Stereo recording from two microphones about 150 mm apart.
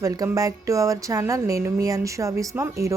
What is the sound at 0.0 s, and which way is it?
Speech, 20° right (ahead or behind).